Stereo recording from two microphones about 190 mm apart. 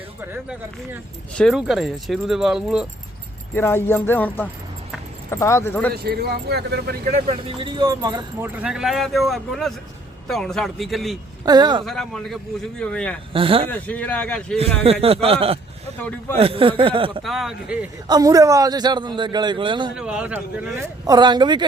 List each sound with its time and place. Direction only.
0.2 s speech: 10° right (ahead or behind)
1.4 s speech: centre (ahead or behind)
3.5 s speech: 10° left (ahead or behind)
5.9 s a man's voice: 55° right (ahead or behind)
7.3 s speech: 30° right (ahead or behind); by 11.2 s centre (ahead or behind)
11.4 s a man's voice: 20° right (ahead or behind)
11.9 s speech: centre (ahead or behind)
13.3 s a man's voice: 30° right (ahead or behind)
13.7 s speech: 10° left (ahead or behind)
14.8 s a man's voice: 30° right (ahead or behind)
17.2 s speech: centre (ahead or behind)
18.1 s a man's voice: 20° right (ahead or behind)
20.0 s speech: 5° right (ahead or behind)
21.1 s a man's voice: 20° right (ahead or behind)